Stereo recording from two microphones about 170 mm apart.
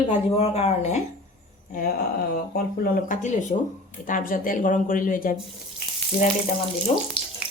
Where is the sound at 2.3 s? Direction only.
65° left (ahead or behind).